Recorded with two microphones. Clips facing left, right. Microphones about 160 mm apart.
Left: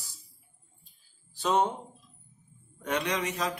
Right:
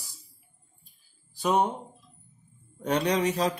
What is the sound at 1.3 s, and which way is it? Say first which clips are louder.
Speech: right 2 dB; 10° right (ahead or behind).